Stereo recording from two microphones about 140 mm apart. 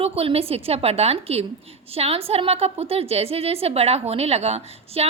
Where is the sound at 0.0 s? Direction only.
45° right (ahead or behind).